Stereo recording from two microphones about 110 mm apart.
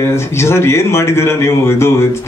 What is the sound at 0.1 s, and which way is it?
A man's voice, 25° left (ahead or behind).